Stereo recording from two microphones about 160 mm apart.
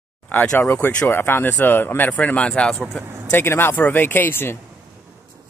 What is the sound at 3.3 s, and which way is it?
Speech, 15° left (ahead or behind).